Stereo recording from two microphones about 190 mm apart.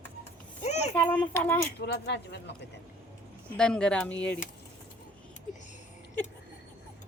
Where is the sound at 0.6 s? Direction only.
35° left (ahead or behind).